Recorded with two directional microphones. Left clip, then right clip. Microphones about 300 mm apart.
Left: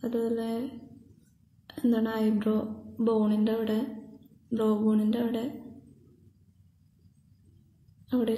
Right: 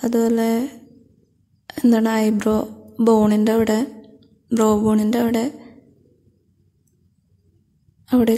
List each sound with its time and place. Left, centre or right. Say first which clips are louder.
0.0 s speech: right 11 dB; right
1.8 s speech: right 10 dB; right
8.1 s speech: right 11 dB; right